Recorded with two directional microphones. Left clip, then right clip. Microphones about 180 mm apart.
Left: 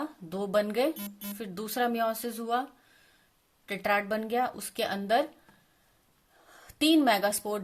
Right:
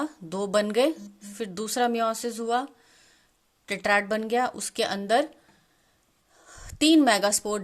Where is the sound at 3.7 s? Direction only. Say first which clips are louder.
Right 4 dB; 20° right (ahead or behind).